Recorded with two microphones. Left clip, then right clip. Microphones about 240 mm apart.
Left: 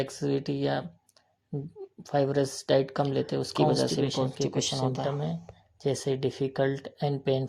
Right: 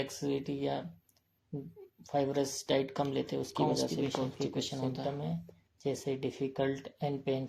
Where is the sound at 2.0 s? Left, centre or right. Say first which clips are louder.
Left 6 dB; left.